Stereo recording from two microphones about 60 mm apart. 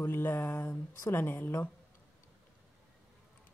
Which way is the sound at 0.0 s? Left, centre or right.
Left.